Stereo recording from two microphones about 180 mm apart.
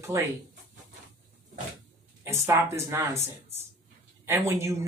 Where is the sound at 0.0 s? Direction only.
15° right (ahead or behind).